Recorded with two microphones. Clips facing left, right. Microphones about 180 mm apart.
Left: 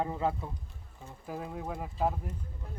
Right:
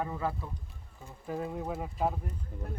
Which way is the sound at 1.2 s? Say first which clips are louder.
Right 3 dB; centre (ahead or behind).